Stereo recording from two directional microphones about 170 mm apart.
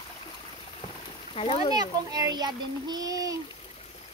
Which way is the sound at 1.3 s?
35° left (ahead or behind).